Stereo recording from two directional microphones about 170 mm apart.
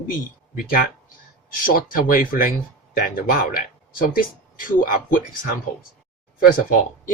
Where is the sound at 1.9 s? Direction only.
55° left (ahead or behind).